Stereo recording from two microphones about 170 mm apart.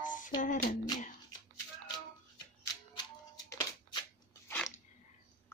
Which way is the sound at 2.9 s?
25° left (ahead or behind).